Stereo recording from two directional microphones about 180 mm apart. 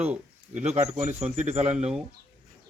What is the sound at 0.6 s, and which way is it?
Speech, 40° right (ahead or behind).